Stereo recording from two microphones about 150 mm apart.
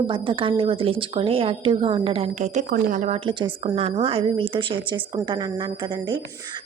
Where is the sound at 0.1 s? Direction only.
35° right (ahead or behind); by 2.6 s 50° right (ahead or behind).